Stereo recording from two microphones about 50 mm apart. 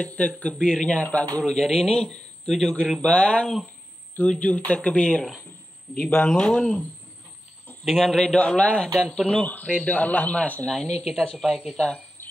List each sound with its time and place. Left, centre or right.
0.0 s speech: left
0.6 s a man's voice: centre
1.1 s speech: left
1.4 s a man's voice: centre; by 6.5 s left
6.5 s a man's voice: centre
7.8 s a woman's voice: centre
8.4 s speech: left
9.8 s speech: left
10.7 s a woman's voice: centre